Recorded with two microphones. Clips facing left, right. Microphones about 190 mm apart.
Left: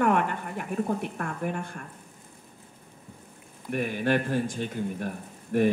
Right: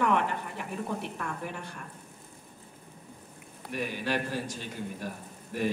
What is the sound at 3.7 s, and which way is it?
A woman's voice, 50° left (ahead or behind).